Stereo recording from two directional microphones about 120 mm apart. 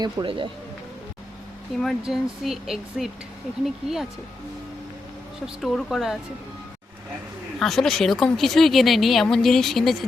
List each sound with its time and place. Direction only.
0.0 s speech: 45° right (ahead or behind)
1.8 s speech: centre (ahead or behind)
5.6 s speech: centre (ahead or behind)
7.6 s speech: 5° left (ahead or behind)